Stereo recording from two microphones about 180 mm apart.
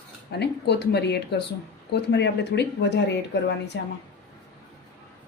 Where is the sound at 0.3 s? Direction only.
65° left (ahead or behind).